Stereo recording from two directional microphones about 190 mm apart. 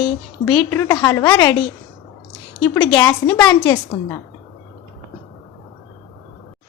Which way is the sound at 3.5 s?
20° left (ahead or behind).